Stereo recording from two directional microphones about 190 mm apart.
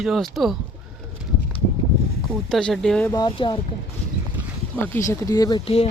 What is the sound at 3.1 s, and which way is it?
Speech, 25° left (ahead or behind).